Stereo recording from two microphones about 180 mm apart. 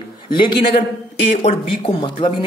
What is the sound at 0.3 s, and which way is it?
Speech, 25° left (ahead or behind).